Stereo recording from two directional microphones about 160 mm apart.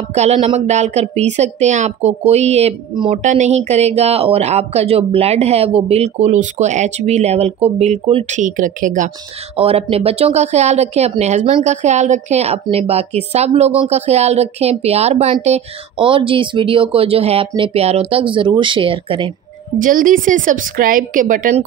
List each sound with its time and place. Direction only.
0.1 s speech: 40° right (ahead or behind)
9.6 s speech: 40° right (ahead or behind)
19.8 s a woman's voice: 55° right (ahead or behind)